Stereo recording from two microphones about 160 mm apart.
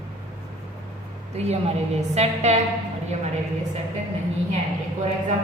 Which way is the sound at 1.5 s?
40° right (ahead or behind).